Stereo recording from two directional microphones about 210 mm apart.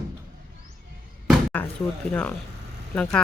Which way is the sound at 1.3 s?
5° left (ahead or behind).